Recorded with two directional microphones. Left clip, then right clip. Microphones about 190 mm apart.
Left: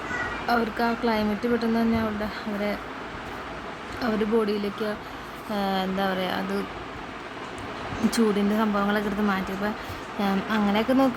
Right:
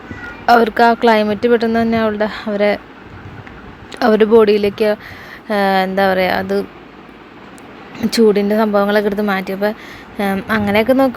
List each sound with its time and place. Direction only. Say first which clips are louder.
0.4 s speech: right 16 dB; 35° right (ahead or behind)
4.0 s speech: right 15 dB; 40° right (ahead or behind)
8.1 s speech: right 13 dB; 35° right (ahead or behind)